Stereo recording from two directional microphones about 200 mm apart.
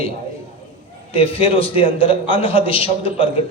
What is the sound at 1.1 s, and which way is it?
A man's voice, 30° left (ahead or behind).